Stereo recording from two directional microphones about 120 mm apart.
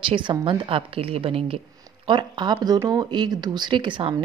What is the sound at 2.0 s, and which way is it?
A woman's voice, 40° right (ahead or behind).